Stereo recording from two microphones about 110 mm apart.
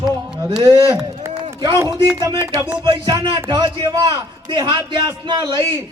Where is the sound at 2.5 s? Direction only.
20° right (ahead or behind).